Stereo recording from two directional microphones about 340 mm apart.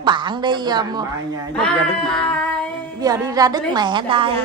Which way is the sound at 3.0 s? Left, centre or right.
Centre.